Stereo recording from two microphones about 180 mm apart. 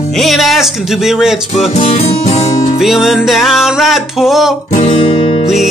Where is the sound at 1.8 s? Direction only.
35° left (ahead or behind).